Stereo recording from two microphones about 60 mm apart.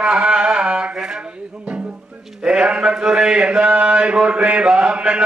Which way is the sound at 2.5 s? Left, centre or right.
Centre.